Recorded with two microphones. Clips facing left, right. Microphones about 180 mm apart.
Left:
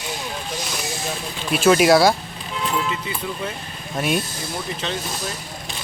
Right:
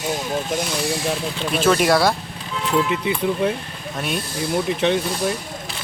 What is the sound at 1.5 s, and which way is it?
Speech, 5° left (ahead or behind).